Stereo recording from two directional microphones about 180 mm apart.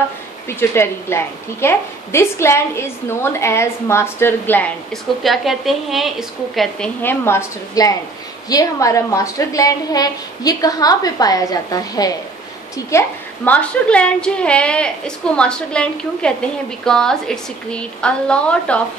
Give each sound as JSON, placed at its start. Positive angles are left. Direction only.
{"t": 0.5, "sound": "a woman's voice", "side_deg": 15}
{"t": 5.2, "sound": "a woman's voice", "side_deg": 0}